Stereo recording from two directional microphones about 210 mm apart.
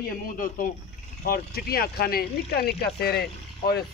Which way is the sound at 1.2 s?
45° left (ahead or behind).